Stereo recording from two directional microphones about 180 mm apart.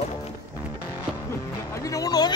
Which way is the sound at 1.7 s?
20° left (ahead or behind).